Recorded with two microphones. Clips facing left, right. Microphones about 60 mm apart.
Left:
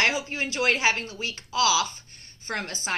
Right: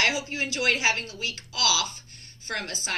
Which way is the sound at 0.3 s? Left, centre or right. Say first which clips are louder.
Left 1 dB; left.